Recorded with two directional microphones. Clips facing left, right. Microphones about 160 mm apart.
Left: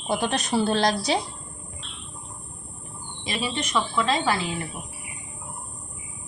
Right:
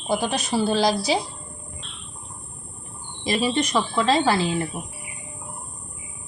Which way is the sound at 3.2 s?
40° right (ahead or behind).